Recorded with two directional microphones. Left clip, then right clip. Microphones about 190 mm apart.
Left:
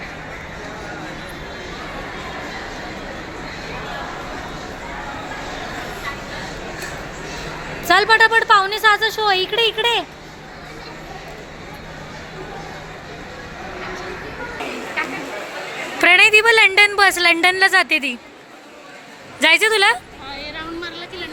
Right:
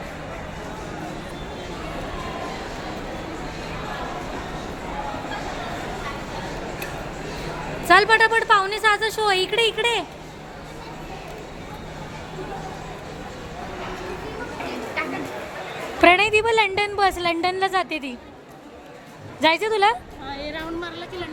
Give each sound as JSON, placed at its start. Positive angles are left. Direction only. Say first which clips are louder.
{"t": 7.9, "sound": "a woman's voice", "louder": "left 2 dB", "side_deg": 0}
{"t": 16.0, "sound": "a woman's voice", "louder": "left 4 dB", "side_deg": -5}
{"t": 19.4, "sound": "speech", "louder": "left 5 dB", "side_deg": -5}
{"t": 20.2, "sound": "a sound", "louder": "right 2 dB", "side_deg": -65}